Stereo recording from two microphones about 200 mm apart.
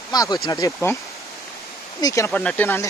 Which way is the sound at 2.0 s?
15° left (ahead or behind).